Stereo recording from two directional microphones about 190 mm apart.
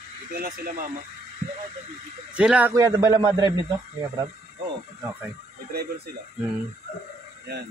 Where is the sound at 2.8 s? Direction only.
15° right (ahead or behind).